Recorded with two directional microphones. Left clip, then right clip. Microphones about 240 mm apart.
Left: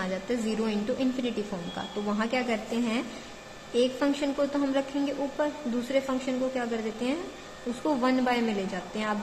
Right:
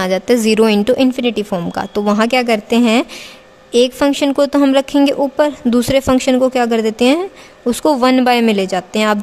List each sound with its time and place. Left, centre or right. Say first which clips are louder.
0.0 s a woman's voice: right 17 dB; right